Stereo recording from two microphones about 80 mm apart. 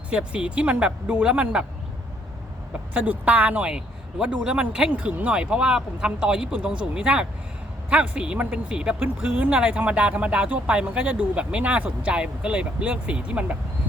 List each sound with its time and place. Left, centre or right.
0.1 s speech: centre
2.9 s speech: centre